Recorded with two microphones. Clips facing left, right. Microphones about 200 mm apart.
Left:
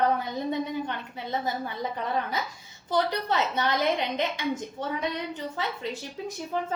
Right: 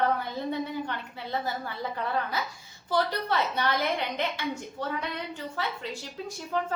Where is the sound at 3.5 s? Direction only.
20° left (ahead or behind).